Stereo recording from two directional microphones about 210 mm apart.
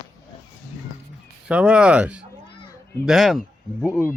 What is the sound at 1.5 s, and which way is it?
Speech, 5° right (ahead or behind).